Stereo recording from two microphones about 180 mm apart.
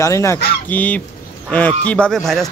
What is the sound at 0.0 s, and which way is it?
Speech, 15° left (ahead or behind).